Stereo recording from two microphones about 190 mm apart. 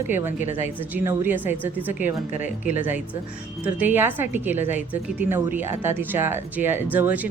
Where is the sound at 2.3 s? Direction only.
40° left (ahead or behind).